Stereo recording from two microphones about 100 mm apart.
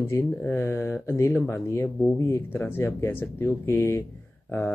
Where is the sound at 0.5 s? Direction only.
25° left (ahead or behind).